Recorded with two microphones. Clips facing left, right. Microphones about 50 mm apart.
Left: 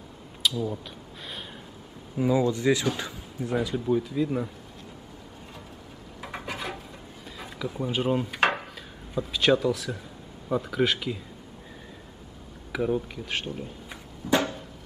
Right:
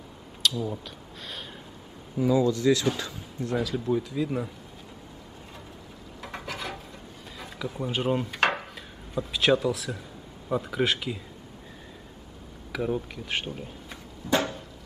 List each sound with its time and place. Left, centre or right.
0.4 s speech: centre
2.1 s speech: left
3.0 s speech: centre
6.2 s a sound: centre
7.3 s speech: centre
12.7 s speech: centre
13.8 s a sound: centre